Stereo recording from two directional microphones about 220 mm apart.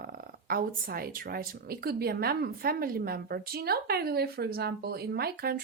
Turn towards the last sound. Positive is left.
turn(degrees=-45)  # may be behind; listen again after turning